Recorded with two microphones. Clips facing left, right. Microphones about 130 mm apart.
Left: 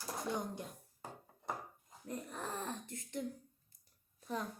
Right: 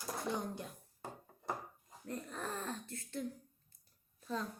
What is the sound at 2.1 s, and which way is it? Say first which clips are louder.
Speech: even; 15° left (ahead or behind).